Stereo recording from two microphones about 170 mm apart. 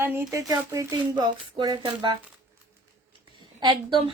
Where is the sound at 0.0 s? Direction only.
15° right (ahead or behind).